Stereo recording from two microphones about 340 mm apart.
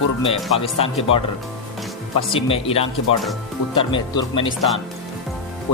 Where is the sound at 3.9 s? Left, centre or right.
Centre.